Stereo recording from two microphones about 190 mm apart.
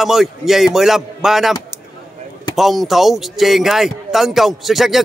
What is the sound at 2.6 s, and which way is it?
Speech, centre (ahead or behind).